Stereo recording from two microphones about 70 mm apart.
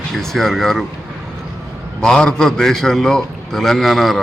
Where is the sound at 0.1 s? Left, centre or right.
Centre.